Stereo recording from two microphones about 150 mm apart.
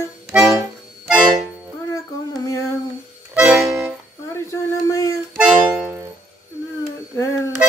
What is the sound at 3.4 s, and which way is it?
Accordion, 5° right (ahead or behind).